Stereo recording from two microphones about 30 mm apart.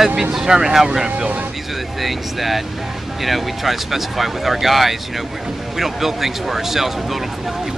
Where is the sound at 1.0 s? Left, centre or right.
Right.